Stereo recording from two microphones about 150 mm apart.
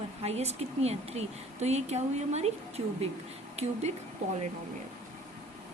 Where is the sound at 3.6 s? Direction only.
45° right (ahead or behind).